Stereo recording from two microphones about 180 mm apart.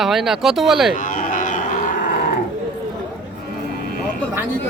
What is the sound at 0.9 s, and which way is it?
Cattle, 50° left (ahead or behind).